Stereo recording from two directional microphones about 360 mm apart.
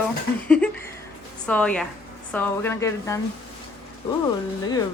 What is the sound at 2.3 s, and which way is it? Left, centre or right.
Speech, centre.